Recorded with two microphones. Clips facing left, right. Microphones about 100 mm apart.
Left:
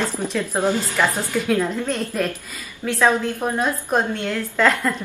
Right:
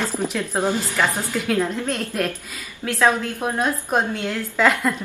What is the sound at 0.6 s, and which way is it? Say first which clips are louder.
Speech: left 1 dB; 15° right (ahead or behind).